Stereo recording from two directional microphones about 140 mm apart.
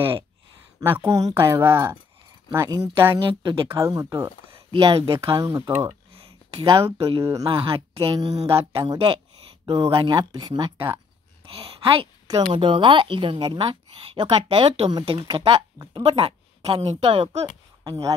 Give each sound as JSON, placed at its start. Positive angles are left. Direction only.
{"t": 0.7, "sound": "speech", "side_deg": -15}
{"t": 3.2, "sound": "a woman's voice", "side_deg": -35}
{"t": 3.8, "sound": "speech", "side_deg": -20}
{"t": 5.2, "sound": "speech", "side_deg": -25}
{"t": 5.9, "sound": "a sound", "side_deg": -40}
{"t": 7.2, "sound": "speech", "side_deg": -25}
{"t": 7.5, "sound": "a woman's voice", "side_deg": -40}